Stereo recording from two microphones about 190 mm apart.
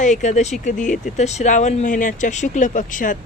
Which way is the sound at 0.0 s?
40° left (ahead or behind).